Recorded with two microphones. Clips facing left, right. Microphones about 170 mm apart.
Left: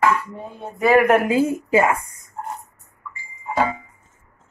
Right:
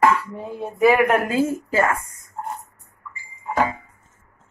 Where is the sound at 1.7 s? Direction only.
15° left (ahead or behind).